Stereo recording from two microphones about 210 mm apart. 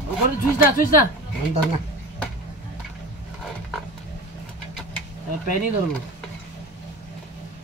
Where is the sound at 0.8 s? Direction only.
40° left (ahead or behind).